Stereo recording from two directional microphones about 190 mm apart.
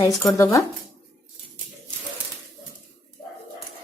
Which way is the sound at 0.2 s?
15° left (ahead or behind).